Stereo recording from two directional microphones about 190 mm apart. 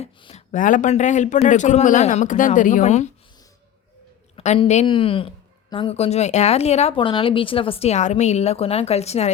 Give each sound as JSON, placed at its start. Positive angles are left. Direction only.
{"t": 0.0, "sound": "a sound", "side_deg": 30}
{"t": 0.5, "sound": "speech", "side_deg": 45}
{"t": 4.4, "sound": "speech", "side_deg": 30}